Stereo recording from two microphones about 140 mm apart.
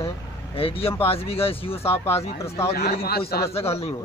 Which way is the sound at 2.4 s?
20° left (ahead or behind).